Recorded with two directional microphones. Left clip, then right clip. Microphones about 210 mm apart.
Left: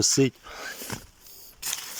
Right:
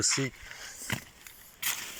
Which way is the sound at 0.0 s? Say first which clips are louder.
Left 7 dB; 30° left (ahead or behind).